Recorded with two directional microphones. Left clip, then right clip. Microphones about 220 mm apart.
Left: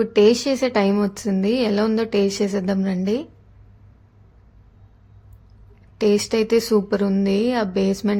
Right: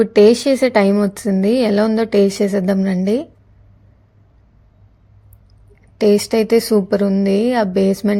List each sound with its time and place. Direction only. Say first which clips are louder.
0.0 s speech: right 5 dB; 20° right (ahead or behind)
6.0 s speech: right 5 dB; 15° right (ahead or behind)